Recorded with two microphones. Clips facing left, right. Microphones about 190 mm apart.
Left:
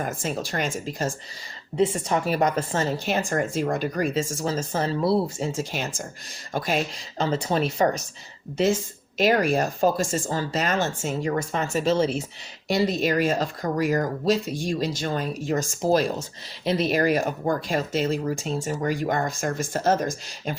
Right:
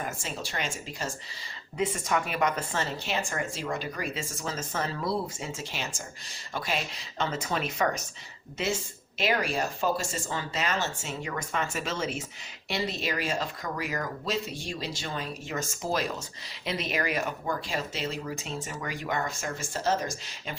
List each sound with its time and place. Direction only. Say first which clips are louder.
0.0 s speech: left 7 dB; 50° left (ahead or behind)
1.8 s speech: left 6 dB; 40° left (ahead or behind)
5.4 s speech: left 8 dB; 45° left (ahead or behind)
9.1 s speech: left 8 dB; 45° left (ahead or behind)
11.2 s speech: left 6 dB; 40° left (ahead or behind)
12.6 s speech: left 9 dB; 45° left (ahead or behind)